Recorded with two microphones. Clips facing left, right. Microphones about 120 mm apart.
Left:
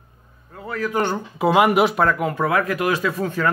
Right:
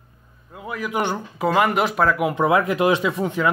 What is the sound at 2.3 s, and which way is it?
Speech, 20° right (ahead or behind).